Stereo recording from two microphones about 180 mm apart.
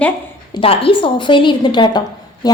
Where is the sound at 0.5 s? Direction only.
30° left (ahead or behind).